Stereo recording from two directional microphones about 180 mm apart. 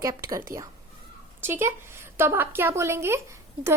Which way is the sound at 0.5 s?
55° right (ahead or behind).